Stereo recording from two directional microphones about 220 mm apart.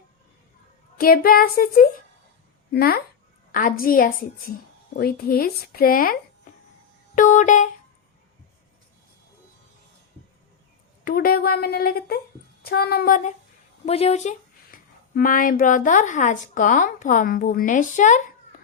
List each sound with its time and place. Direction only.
0.9 s speech: 40° left (ahead or behind)
7.2 s a sound: 35° left (ahead or behind)
11.0 s speech: 40° left (ahead or behind)